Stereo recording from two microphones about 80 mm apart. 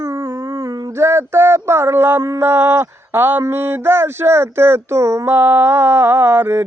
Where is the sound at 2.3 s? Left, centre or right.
Right.